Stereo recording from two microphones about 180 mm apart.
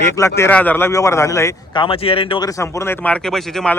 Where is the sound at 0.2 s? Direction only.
15° left (ahead or behind).